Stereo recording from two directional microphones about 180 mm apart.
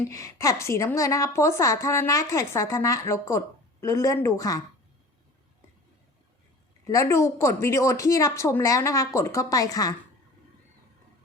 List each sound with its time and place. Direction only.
0.1 s a woman's voice: 15° left (ahead or behind)
6.8 s a woman's voice: 15° left (ahead or behind)